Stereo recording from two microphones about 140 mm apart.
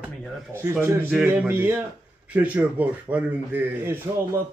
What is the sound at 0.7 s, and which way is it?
Speech, 15° right (ahead or behind).